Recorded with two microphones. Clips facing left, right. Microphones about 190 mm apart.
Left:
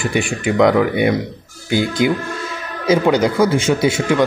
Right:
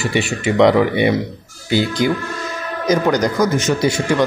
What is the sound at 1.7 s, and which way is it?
Speech, 50° left (ahead or behind).